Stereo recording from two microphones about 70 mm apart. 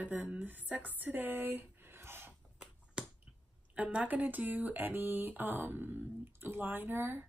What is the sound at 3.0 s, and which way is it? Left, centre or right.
Finger snapping, centre.